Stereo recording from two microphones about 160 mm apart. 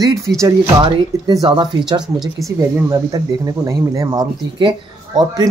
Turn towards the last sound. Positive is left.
turn(degrees=-25)  # may be behind; listen again after turning